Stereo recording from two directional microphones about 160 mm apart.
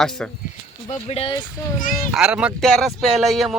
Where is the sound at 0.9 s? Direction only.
40° left (ahead or behind).